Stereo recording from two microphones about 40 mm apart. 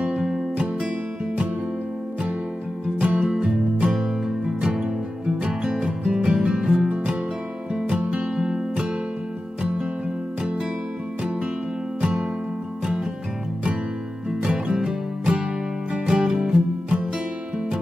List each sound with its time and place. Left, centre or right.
0.2 s music: centre
3.0 s music: right
8.4 s music: right
12.0 s music: right
14.4 s music: right